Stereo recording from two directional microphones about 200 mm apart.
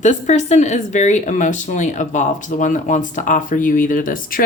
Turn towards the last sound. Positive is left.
turn(degrees=40)  # may be behind; listen again after turning